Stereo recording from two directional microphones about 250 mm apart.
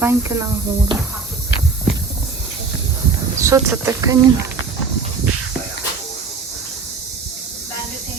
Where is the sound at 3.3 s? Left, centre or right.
Centre.